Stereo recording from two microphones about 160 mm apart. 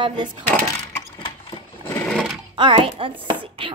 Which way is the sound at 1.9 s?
5° left (ahead or behind).